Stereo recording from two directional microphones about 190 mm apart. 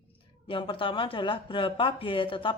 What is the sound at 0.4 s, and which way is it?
Speech, 25° left (ahead or behind).